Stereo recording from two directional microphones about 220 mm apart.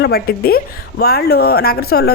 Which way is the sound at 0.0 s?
45° left (ahead or behind).